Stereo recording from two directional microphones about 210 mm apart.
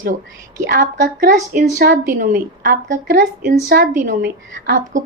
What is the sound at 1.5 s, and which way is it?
Speech, 45° right (ahead or behind).